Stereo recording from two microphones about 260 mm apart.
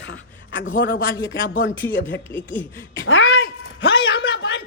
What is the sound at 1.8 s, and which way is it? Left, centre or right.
Speech, centre.